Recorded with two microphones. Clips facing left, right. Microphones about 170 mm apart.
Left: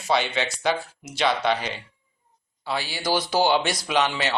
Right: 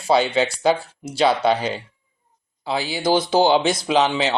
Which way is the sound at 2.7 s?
25° right (ahead or behind).